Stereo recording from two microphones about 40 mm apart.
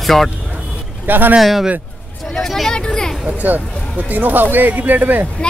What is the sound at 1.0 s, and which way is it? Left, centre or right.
Speech, right.